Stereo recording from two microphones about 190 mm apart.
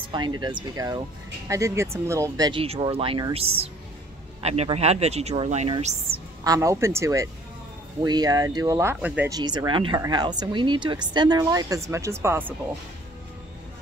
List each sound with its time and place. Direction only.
0.0 s a sound: 25° right (ahead or behind)
0.4 s speech: 25° right (ahead or behind)
2.6 s speech: 30° right (ahead or behind)
6.4 s speech: 20° right (ahead or behind)
9.3 s speech: 20° right (ahead or behind)